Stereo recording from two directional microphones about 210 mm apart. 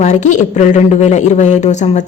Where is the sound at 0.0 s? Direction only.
35° left (ahead or behind).